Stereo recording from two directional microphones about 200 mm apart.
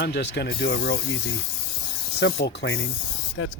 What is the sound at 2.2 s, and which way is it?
Speech, 55° left (ahead or behind).